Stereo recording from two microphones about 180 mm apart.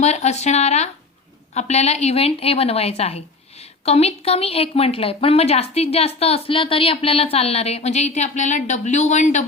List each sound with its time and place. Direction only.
0.0 s a woman's voice: 40° left (ahead or behind)